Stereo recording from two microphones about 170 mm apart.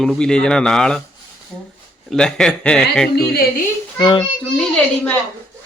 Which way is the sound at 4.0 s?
25° left (ahead or behind).